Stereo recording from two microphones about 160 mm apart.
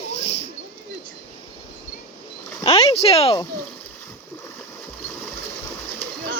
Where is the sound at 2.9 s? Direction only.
40° left (ahead or behind).